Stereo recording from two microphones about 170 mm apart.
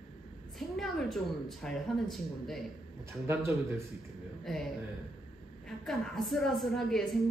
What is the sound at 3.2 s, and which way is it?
Speech, 15° right (ahead or behind).